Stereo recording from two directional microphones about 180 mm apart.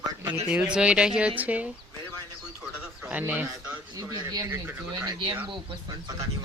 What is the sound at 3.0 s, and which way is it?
Speech, 10° right (ahead or behind).